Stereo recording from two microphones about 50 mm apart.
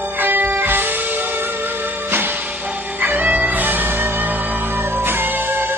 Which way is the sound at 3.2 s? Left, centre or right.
Right.